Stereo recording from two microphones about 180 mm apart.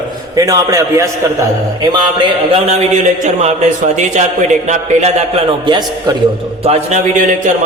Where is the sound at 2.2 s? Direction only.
35° right (ahead or behind).